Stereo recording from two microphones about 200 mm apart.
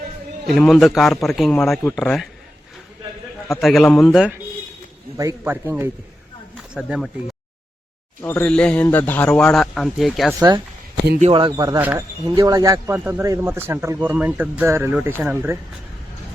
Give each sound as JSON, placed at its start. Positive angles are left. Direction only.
{"t": 0.4, "sound": "a man's voice", "side_deg": 0}
{"t": 3.5, "sound": "a man's voice", "side_deg": 0}
{"t": 5.1, "sound": "a man's voice", "side_deg": -15}
{"t": 8.2, "sound": "a man's voice", "side_deg": 10}
{"t": 11.2, "sound": "speech", "side_deg": -25}
{"t": 11.8, "sound": "a man's voice", "side_deg": -10}